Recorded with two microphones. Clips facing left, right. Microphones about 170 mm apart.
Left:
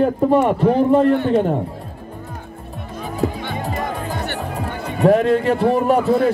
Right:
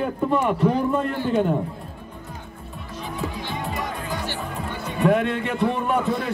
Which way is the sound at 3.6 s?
40° left (ahead or behind).